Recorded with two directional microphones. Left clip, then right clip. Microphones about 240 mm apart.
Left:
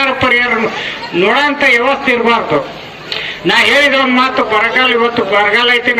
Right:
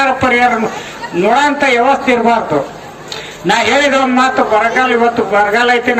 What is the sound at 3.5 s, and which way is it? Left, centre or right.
A man's voice, right.